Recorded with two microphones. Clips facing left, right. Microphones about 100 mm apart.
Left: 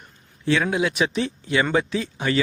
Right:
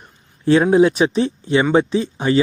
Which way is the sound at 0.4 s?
35° right (ahead or behind).